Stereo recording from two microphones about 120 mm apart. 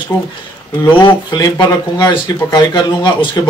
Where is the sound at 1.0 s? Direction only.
40° left (ahead or behind).